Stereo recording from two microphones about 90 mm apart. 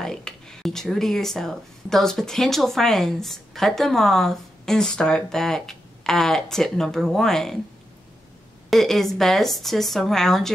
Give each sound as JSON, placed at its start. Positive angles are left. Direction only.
{"t": 0.0, "sound": "speech", "side_deg": 5}
{"t": 8.6, "sound": "speech", "side_deg": 5}